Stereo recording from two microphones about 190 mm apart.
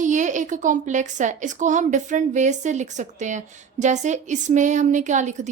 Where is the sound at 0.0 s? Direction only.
40° right (ahead or behind).